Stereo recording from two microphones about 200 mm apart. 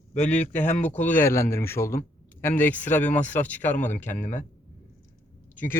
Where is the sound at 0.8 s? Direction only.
10° left (ahead or behind).